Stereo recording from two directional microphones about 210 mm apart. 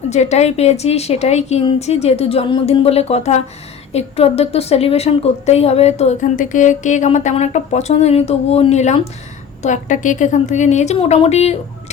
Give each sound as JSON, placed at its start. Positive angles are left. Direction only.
{"t": 0.1, "sound": "a woman's voice", "side_deg": 30}